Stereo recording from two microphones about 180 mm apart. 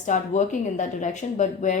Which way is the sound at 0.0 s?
45° left (ahead or behind).